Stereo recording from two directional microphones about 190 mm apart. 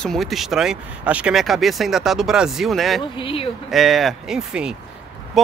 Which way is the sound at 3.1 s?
30° left (ahead or behind).